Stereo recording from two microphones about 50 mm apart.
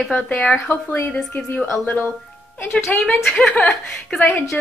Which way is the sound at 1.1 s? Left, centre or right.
Centre.